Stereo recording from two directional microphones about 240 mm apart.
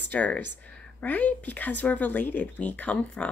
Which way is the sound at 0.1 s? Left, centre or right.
Centre.